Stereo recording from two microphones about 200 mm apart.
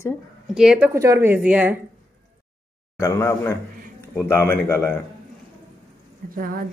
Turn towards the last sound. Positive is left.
turn(degrees=-45)  # may be behind; listen again after turning